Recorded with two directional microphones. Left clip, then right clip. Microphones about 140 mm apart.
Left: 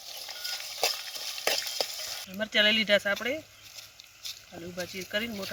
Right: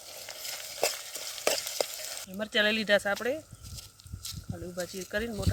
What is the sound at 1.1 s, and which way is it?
Stir, 15° right (ahead or behind).